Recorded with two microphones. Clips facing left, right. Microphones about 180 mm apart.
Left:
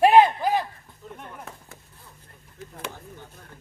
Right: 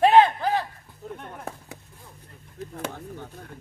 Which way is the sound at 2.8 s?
65° right (ahead or behind).